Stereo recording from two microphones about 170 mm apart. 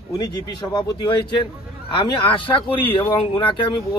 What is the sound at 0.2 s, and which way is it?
A man's voice, 25° left (ahead or behind).